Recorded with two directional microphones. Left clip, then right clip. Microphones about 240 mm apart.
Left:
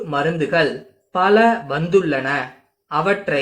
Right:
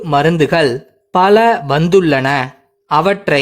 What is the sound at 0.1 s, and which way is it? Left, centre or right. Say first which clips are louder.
Speech: right 8 dB; right.